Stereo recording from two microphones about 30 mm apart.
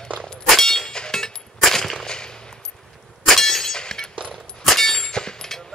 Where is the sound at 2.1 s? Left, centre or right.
Left.